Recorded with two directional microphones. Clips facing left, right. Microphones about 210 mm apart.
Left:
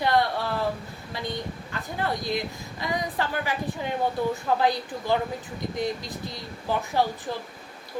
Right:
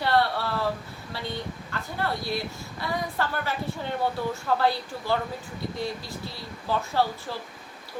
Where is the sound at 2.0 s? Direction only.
15° left (ahead or behind).